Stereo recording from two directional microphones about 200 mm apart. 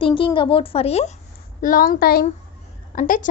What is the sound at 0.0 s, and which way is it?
Speech, 25° left (ahead or behind).